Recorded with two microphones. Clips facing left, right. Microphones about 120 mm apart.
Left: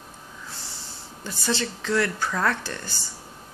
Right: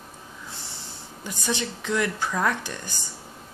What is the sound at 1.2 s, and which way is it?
Speech, 15° right (ahead or behind).